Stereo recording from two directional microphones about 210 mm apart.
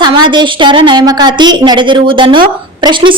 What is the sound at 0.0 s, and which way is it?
A woman's voice, 20° right (ahead or behind).